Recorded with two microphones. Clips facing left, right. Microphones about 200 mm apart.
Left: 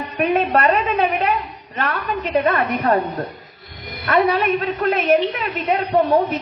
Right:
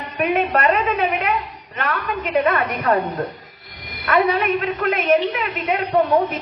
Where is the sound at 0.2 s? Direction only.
30° left (ahead or behind).